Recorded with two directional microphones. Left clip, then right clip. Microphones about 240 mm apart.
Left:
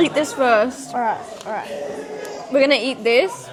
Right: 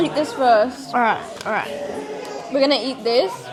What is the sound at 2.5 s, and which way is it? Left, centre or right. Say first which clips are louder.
Speech: left 2 dB; centre.